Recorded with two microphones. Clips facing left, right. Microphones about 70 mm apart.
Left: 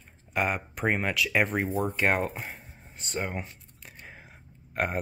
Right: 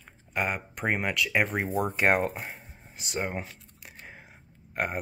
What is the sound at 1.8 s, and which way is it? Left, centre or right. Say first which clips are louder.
Speech: right 2 dB; centre.